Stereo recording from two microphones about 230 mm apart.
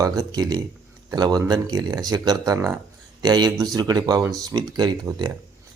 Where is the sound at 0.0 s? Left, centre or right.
Centre.